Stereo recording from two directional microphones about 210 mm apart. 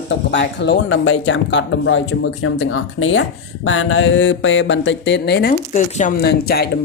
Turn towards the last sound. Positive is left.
turn(degrees=50)  # may be behind; listen again after turning